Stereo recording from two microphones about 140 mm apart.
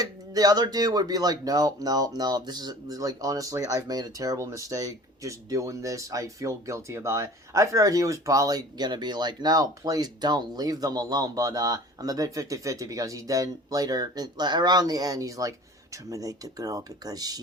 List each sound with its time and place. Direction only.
0.0 s speech: 25° right (ahead or behind)